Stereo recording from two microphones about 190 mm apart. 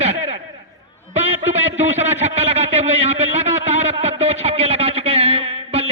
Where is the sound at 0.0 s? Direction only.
35° right (ahead or behind).